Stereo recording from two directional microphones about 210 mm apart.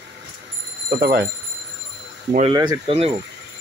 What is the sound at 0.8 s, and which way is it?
Speech, 50° right (ahead or behind).